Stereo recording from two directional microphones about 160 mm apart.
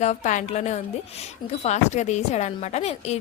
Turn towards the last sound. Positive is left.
turn(degrees=40)  # may be behind; listen again after turning